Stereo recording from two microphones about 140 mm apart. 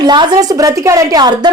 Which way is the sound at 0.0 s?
30° right (ahead or behind).